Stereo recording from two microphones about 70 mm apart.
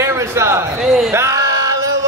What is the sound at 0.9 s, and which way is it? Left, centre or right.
Speech, centre.